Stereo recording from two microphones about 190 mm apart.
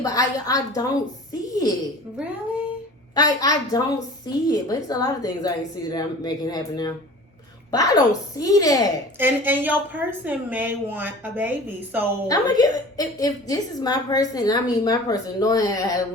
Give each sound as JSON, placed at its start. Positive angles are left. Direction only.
{"t": 0.0, "sound": "a woman's voice", "side_deg": 20}
{"t": 1.5, "sound": "a sound", "side_deg": 20}
{"t": 3.2, "sound": "a woman's voice", "side_deg": 20}
{"t": 9.1, "sound": "a woman's voice", "side_deg": -10}
{"t": 12.3, "sound": "a woman's voice", "side_deg": 20}